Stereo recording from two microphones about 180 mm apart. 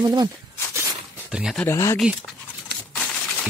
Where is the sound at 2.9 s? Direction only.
5° left (ahead or behind).